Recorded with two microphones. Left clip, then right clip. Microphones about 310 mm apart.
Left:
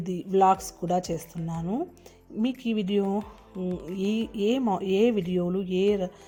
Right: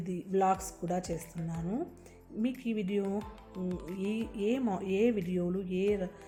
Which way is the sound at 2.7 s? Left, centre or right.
Left.